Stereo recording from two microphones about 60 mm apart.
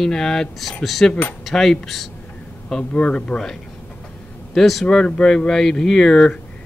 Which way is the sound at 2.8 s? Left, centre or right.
Centre.